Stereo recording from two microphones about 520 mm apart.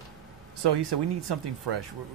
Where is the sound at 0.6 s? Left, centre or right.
Right.